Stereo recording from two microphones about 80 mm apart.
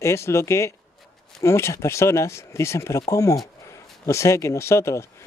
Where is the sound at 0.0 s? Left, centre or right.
Left.